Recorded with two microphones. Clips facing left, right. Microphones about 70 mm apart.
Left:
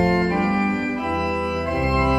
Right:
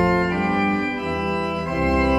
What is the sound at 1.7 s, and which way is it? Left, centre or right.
Organ, centre.